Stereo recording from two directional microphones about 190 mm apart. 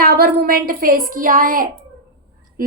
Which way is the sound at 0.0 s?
55° right (ahead or behind).